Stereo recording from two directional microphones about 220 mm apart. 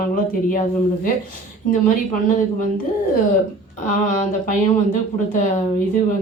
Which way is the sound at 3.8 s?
35° left (ahead or behind).